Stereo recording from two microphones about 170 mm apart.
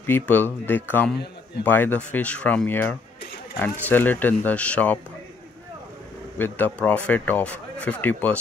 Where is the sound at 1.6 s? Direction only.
10° left (ahead or behind).